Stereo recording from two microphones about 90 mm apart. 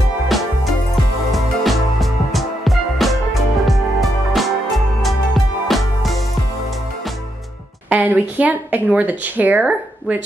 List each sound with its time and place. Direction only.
1.3 s music: centre (ahead or behind)
7.9 s speech: 15° right (ahead or behind)